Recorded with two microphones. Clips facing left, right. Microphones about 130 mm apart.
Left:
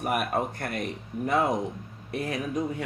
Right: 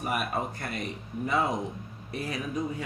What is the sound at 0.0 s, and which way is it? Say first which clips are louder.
Speech: left 3 dB; 60° left (ahead or behind).